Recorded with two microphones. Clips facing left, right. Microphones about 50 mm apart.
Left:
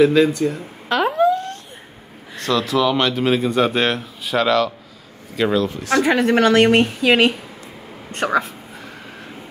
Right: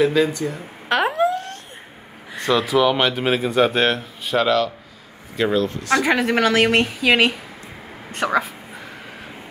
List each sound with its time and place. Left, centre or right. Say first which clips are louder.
0.0 s a woman's voice: left 4 dB; centre
0.9 s speech: left 1 dB; centre
1.2 s a sound: left 3 dB; right
2.3 s a woman's voice: right 1 dB; centre